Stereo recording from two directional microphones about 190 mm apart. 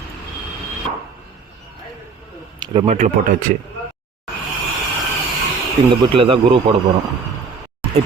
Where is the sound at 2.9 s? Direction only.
45° right (ahead or behind).